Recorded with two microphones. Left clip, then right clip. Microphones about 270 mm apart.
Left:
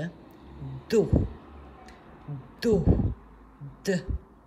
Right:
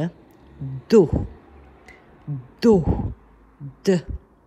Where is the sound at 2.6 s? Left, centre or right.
Centre.